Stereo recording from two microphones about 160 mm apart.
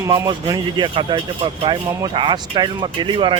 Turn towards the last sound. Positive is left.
turn(degrees=-30)  # may be behind; listen again after turning